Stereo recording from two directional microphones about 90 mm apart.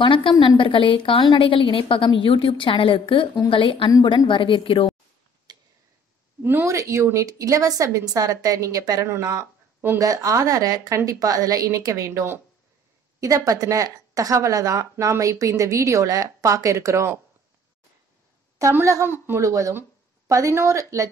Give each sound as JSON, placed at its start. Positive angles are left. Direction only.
{"t": 0.0, "sound": "a woman's voice", "side_deg": 65}
{"t": 2.0, "sound": "a woman's voice", "side_deg": 65}
{"t": 5.5, "sound": "tick-tock", "side_deg": -50}
{"t": 6.4, "sound": "speech", "side_deg": -30}
{"t": 9.0, "sound": "speech", "side_deg": -30}
{"t": 9.9, "sound": "speech", "side_deg": -40}
{"t": 18.6, "sound": "speech", "side_deg": -30}